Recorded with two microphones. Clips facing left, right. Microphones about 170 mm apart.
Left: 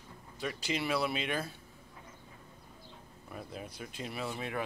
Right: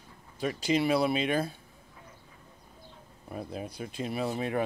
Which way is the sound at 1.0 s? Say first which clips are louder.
Right 7 dB; 35° right (ahead or behind).